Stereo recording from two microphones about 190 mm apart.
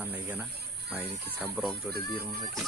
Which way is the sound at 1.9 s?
55° right (ahead or behind).